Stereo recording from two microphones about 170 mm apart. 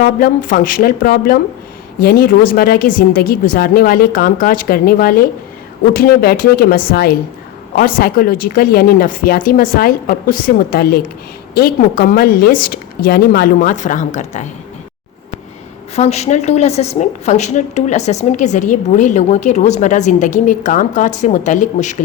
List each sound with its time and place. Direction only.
0.0 s speech: 55° left (ahead or behind)
16.0 s a woman's voice: 40° left (ahead or behind)